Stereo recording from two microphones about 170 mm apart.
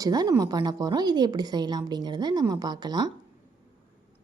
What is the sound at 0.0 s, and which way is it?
A woman's voice, 20° right (ahead or behind).